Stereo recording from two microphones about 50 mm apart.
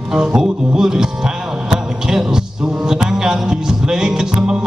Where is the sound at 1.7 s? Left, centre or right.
Centre.